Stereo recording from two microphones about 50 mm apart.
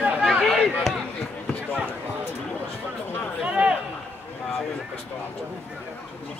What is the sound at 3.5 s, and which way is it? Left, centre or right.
Run, right.